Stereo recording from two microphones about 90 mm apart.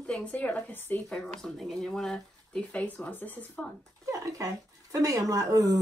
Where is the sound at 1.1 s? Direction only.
5° left (ahead or behind).